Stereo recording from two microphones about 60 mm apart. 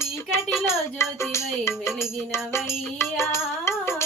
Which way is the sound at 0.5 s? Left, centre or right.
Left.